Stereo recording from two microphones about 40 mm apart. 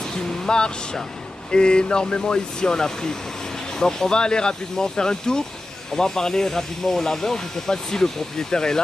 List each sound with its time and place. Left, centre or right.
0.5 s speech: left